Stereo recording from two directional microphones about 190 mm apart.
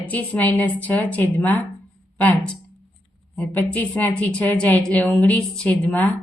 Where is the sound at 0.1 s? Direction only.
10° left (ahead or behind).